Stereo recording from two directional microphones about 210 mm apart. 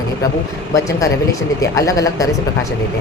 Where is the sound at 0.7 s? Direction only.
15° left (ahead or behind).